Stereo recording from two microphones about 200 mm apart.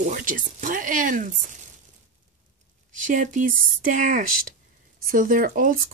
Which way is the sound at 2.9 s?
40° right (ahead or behind).